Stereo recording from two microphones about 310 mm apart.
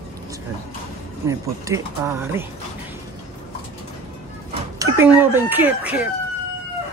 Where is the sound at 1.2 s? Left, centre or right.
Centre.